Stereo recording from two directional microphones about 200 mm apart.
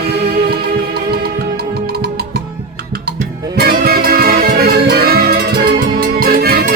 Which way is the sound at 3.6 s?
50° right (ahead or behind).